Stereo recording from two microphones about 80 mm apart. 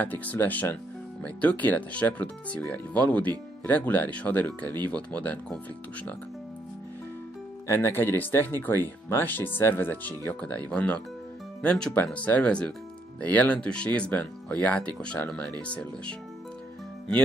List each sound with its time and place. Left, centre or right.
0.0 s speech: centre
7.6 s speech: left; by 16.2 s centre